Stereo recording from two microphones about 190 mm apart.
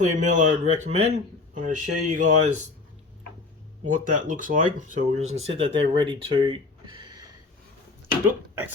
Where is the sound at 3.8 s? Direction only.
45° right (ahead or behind).